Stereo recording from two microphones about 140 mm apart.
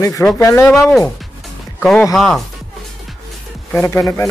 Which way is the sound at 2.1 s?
5° left (ahead or behind).